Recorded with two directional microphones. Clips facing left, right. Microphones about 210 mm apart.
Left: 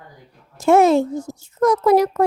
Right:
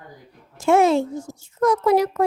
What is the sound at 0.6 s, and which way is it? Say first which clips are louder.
A child's voice: left 3 dB; 40° left (ahead or behind).